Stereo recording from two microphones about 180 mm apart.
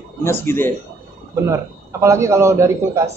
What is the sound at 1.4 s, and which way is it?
A man's voice, 15° right (ahead or behind).